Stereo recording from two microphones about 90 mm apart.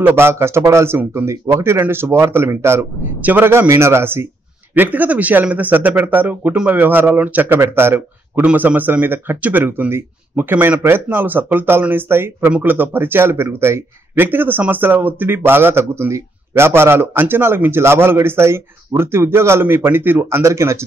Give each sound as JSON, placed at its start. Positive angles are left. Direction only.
{"t": 0.0, "sound": "a man's voice", "side_deg": -25}